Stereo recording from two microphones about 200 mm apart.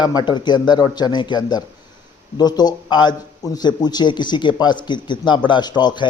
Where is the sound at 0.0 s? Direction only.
20° left (ahead or behind).